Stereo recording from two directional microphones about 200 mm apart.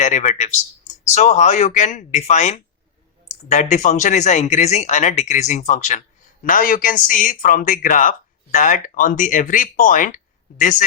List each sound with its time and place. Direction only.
0.0 s speech: 35° left (ahead or behind)